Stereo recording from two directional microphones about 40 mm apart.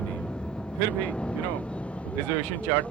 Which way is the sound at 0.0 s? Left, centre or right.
Left.